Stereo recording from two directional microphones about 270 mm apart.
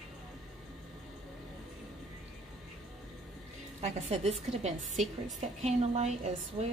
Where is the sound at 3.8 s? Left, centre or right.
Right.